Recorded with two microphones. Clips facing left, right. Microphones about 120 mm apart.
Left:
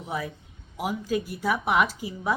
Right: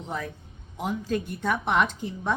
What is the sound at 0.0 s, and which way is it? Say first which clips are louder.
A man's voice: left 1 dB; 5° left (ahead or behind).